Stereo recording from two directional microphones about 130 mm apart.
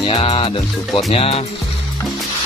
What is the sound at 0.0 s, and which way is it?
Music, 45° left (ahead or behind).